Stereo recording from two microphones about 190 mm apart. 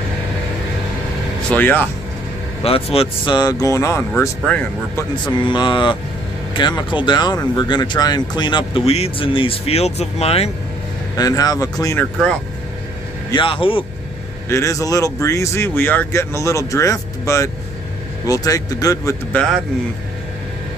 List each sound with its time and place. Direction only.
1.5 s speech: 10° left (ahead or behind)
2.6 s speech: 30° left (ahead or behind); by 5.0 s 5° left (ahead or behind)
5.2 s speech: 25° left (ahead or behind)
11.1 s speech: 20° left (ahead or behind)
13.3 s speech: 25° left (ahead or behind)
14.5 s speech: 15° left (ahead or behind)